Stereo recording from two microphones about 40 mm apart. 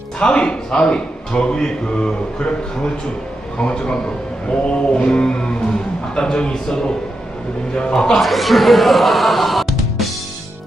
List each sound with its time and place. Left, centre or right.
0.2 s a man's voice: left
3.6 s a man's voice: left
8.2 s speech: centre